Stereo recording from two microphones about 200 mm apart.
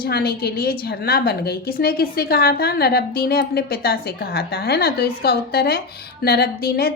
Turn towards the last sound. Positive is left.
turn(degrees=50)  # may be behind; listen again after turning